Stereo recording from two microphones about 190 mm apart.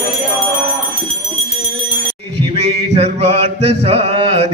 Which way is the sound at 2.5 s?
35° right (ahead or behind).